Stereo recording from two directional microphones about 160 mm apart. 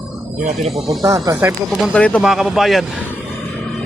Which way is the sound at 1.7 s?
5° left (ahead or behind).